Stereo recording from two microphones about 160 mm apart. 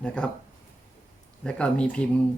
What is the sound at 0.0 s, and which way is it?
Speech, 5° left (ahead or behind).